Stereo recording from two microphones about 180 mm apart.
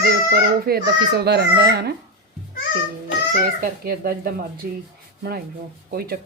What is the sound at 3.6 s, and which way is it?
Speech, 55° right (ahead or behind).